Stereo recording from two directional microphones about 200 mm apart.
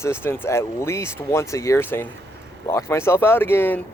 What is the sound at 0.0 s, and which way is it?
Speech, 10° left (ahead or behind).